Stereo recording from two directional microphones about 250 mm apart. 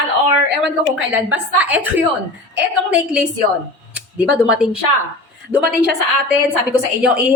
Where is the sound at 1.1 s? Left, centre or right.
Centre.